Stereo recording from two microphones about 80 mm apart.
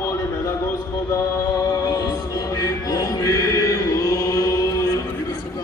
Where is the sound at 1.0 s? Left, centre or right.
Left.